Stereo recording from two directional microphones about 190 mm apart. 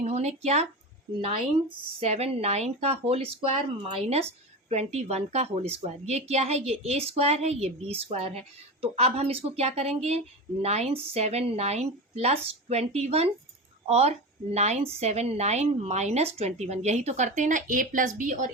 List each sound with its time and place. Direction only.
0.0 s a woman's voice: 35° right (ahead or behind)